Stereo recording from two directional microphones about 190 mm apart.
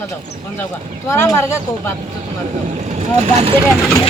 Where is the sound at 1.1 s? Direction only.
15° left (ahead or behind).